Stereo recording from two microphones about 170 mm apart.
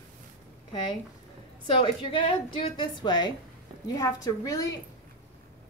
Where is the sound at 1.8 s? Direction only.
30° left (ahead or behind).